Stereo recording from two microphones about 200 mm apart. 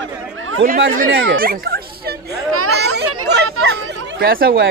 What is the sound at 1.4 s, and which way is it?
Turkey, 50° right (ahead or behind).